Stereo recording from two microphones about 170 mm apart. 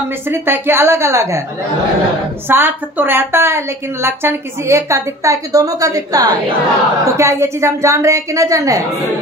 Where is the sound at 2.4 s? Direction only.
10° right (ahead or behind).